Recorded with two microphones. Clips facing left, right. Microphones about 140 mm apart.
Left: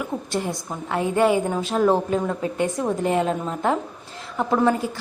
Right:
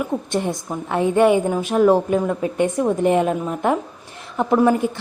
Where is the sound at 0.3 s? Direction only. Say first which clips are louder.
Right 4 dB; 25° right (ahead or behind).